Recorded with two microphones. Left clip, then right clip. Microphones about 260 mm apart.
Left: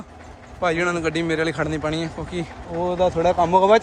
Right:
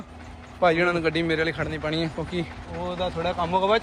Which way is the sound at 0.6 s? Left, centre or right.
Centre.